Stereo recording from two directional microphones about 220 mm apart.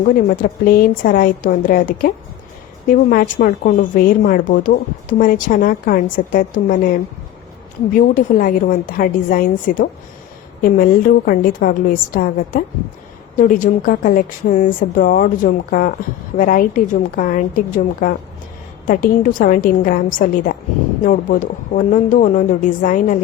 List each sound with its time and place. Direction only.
0.4 s a woman's voice: 40° left (ahead or behind)
8.4 s a woman's voice: 40° left (ahead or behind)